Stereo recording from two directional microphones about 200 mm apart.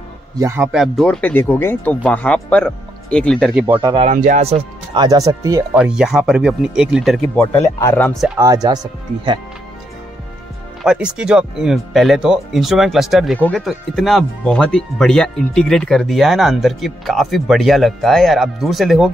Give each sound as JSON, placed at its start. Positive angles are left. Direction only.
{"t": 0.4, "sound": "speech", "side_deg": -10}
{"t": 3.6, "sound": "speech", "side_deg": -15}
{"t": 3.9, "sound": "speech", "side_deg": -35}
{"t": 5.0, "sound": "speech", "side_deg": -20}
{"t": 5.8, "sound": "speech", "side_deg": -5}
{"t": 7.3, "sound": "speech", "side_deg": 15}
{"t": 8.4, "sound": "speech", "side_deg": -20}
{"t": 10.8, "sound": "speech", "side_deg": -5}